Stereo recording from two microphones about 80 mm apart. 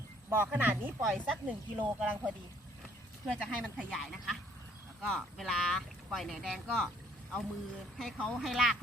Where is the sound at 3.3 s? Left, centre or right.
Centre.